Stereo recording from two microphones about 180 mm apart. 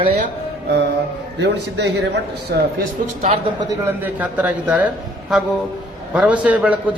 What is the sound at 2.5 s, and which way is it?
Speech, 60° right (ahead or behind).